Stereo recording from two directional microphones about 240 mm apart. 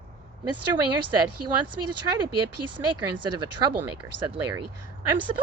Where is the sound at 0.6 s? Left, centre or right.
Right.